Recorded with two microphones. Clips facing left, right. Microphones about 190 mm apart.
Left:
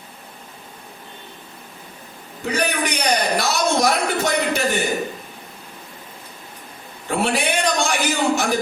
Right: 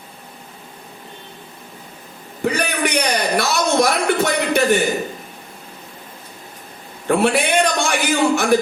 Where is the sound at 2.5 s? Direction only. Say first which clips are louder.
Left 1 dB; 60° right (ahead or behind).